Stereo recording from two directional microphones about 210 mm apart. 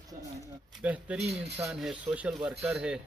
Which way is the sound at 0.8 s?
5° right (ahead or behind).